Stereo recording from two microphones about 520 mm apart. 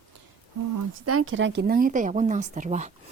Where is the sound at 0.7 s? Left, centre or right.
Right.